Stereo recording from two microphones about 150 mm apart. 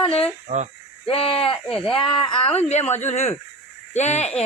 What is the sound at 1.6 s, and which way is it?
Speech, 5° left (ahead or behind).